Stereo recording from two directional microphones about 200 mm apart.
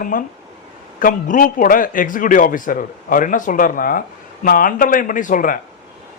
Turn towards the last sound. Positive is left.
turn(degrees=40)  # may be behind; listen again after turning